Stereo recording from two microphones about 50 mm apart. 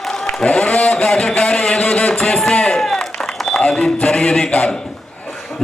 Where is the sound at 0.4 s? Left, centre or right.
Left.